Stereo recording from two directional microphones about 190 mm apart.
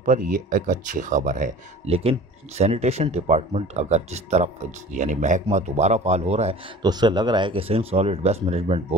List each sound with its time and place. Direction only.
0.0 s speech: 45° right (ahead or behind)
1.9 s speech: 30° right (ahead or behind)
6.8 s speech: 20° right (ahead or behind)